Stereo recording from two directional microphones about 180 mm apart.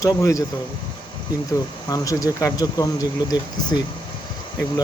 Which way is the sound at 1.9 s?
20° left (ahead or behind).